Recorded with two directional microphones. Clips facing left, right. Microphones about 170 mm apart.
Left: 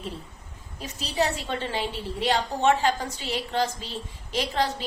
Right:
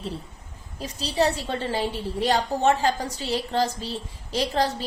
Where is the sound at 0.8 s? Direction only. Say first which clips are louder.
Right 3 dB; 35° right (ahead or behind).